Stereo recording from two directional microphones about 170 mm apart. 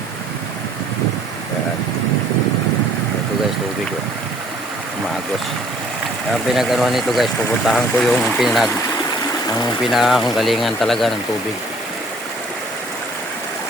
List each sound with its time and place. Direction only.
6.5 s speech: centre (ahead or behind)
9.5 s speech: 25° left (ahead or behind)
9.8 s speech: centre (ahead or behind)